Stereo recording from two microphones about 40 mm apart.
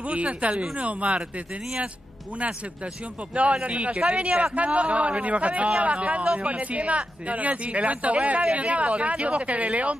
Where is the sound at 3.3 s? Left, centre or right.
Right.